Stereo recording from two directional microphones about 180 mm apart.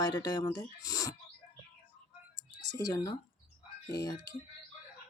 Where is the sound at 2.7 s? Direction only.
20° left (ahead or behind).